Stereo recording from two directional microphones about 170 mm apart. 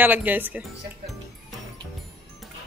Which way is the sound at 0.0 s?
10° right (ahead or behind).